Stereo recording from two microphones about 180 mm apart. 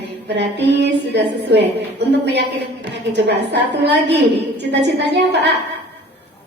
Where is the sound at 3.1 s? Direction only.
70° right (ahead or behind).